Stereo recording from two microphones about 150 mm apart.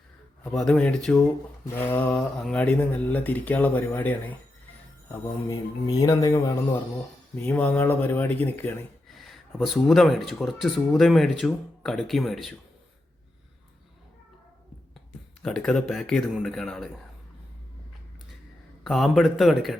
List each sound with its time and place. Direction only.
0.5 s speech: 5° left (ahead or behind); by 6.5 s 25° left (ahead or behind)
7.4 s speech: 10° left (ahead or behind)
9.0 s speech: centre (ahead or behind)
15.4 s speech: 5° left (ahead or behind)
18.8 s speech: centre (ahead or behind)